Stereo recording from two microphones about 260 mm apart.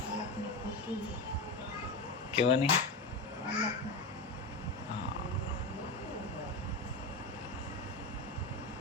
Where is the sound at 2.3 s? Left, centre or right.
Left.